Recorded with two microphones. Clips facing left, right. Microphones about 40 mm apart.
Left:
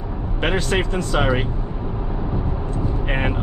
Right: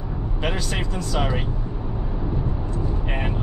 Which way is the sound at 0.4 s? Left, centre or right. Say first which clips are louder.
Left 7 dB; left.